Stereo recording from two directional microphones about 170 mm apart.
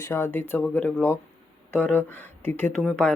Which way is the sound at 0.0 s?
10° left (ahead or behind).